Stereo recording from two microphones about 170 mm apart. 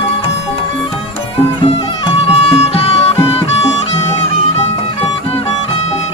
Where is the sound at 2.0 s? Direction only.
35° left (ahead or behind).